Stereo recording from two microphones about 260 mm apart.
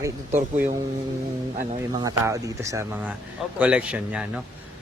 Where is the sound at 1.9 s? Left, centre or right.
Centre.